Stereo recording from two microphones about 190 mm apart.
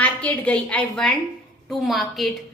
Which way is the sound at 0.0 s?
5° left (ahead or behind).